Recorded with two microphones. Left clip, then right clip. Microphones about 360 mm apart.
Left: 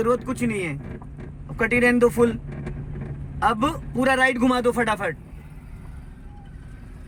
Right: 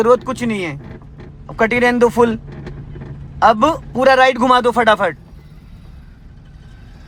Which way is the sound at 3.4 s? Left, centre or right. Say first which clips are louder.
Right 10 dB; centre.